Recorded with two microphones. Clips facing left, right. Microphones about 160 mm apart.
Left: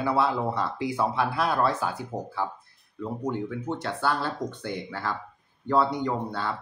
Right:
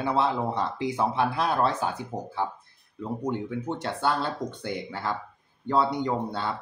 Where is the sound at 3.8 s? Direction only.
20° right (ahead or behind).